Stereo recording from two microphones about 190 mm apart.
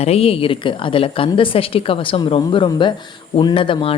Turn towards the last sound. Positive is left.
turn(degrees=30)  # may be behind; listen again after turning